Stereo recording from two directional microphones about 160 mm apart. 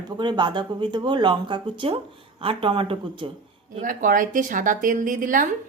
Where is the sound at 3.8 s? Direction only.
60° right (ahead or behind).